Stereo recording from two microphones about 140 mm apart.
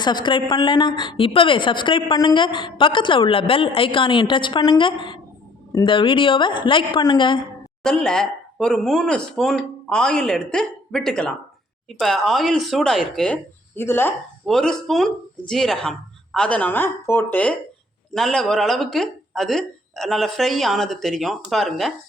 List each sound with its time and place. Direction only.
0.0 s a woman's voice: 30° left (ahead or behind)
7.9 s speech: 5° left (ahead or behind)
14.4 s speech: 5° left (ahead or behind)